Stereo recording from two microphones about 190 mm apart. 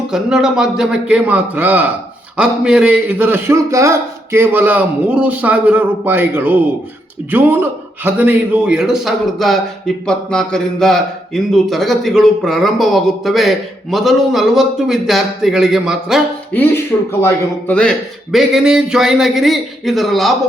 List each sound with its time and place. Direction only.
0.1 s a man's voice: 5° right (ahead or behind)
16.6 s a man's voice: 15° left (ahead or behind)